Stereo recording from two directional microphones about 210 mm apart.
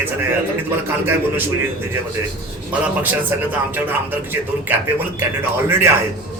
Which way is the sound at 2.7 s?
10° right (ahead or behind).